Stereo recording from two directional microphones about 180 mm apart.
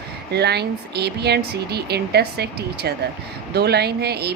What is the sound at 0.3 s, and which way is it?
Speech, 65° right (ahead or behind).